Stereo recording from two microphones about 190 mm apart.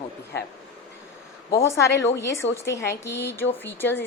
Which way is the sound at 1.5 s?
15° left (ahead or behind).